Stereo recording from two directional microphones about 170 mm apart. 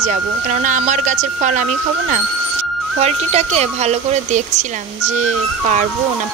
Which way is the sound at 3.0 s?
40° right (ahead or behind).